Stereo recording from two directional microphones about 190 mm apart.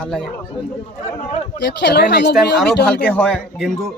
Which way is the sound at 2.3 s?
Centre (ahead or behind).